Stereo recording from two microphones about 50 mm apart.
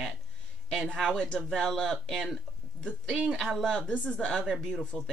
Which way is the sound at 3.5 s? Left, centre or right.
Centre.